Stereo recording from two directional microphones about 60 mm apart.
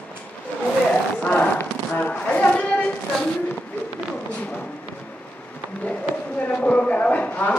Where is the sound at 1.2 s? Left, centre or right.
Centre.